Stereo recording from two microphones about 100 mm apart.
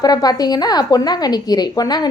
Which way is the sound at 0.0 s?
40° left (ahead or behind).